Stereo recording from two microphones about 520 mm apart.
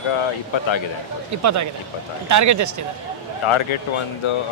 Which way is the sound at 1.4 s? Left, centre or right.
Right.